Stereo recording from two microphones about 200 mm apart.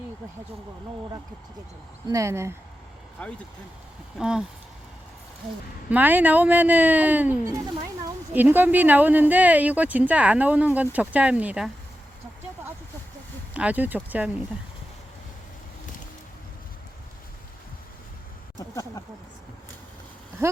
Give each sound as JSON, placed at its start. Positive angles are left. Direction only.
{"t": 2.0, "sound": "speech", "side_deg": -15}
{"t": 3.2, "sound": "speech", "side_deg": 5}
{"t": 4.2, "sound": "speech", "side_deg": -5}
{"t": 5.9, "sound": "speech", "side_deg": -10}
{"t": 13.5, "sound": "speech", "side_deg": -5}
{"t": 18.7, "sound": "a sound", "side_deg": 15}